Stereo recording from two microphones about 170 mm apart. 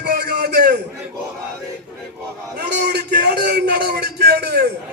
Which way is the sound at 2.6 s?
80° right.